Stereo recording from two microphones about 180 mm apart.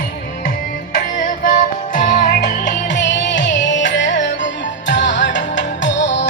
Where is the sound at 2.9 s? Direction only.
80° left.